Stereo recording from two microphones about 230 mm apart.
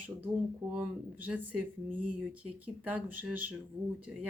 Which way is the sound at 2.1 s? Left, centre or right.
Centre.